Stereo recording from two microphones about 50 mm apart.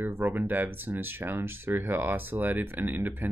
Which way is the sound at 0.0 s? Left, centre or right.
Right.